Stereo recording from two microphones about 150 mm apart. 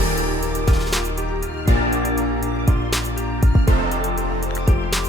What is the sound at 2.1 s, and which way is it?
Music, centre (ahead or behind).